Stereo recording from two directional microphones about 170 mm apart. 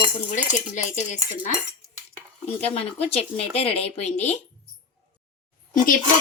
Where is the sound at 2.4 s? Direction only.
35° left (ahead or behind).